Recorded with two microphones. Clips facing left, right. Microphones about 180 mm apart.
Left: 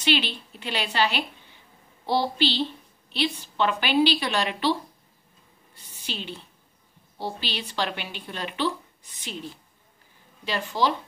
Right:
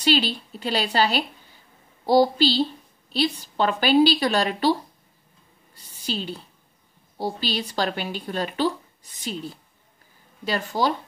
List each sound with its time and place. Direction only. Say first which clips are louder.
0.0 s a woman's voice: right 4 dB; 35° right (ahead or behind)
5.8 s a woman's voice: right 6 dB; 40° right (ahead or behind)